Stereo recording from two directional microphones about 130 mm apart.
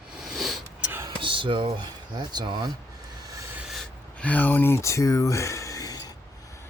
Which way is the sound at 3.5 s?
Centre (ahead or behind).